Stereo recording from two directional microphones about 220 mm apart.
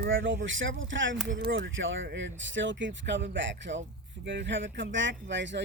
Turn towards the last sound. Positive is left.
turn(degrees=-55)  # may be behind; listen again after turning